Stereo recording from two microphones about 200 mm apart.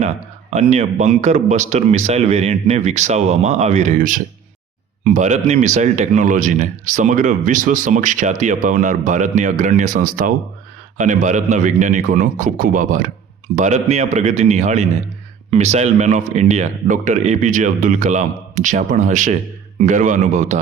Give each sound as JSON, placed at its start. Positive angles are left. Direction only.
{"t": 0.5, "sound": "speech", "side_deg": -35}